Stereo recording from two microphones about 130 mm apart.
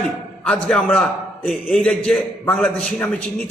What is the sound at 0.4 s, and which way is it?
A man's voice, 10° left (ahead or behind).